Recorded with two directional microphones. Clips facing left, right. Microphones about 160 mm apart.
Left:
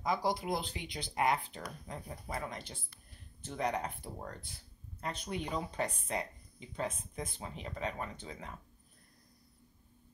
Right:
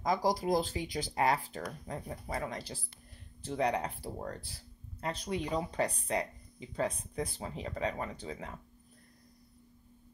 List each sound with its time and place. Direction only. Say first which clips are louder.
0.0 s speech: right 3 dB; 40° right (ahead or behind)